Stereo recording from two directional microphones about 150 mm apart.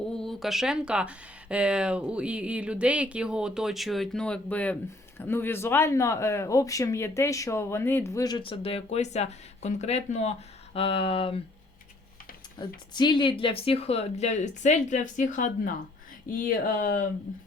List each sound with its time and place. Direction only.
0.1 s speech: 5° left (ahead or behind); by 10.3 s 45° left (ahead or behind)
10.8 s a sound: 40° left (ahead or behind)
12.5 s speech: 30° left (ahead or behind); by 17.1 s 65° left (ahead or behind)